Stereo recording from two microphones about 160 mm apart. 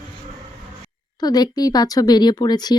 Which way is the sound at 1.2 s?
25° left (ahead or behind).